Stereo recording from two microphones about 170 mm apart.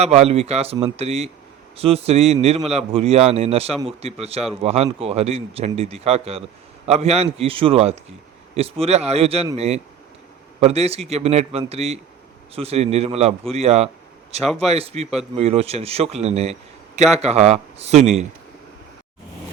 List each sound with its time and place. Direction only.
0.0 s speech: 40° right (ahead or behind)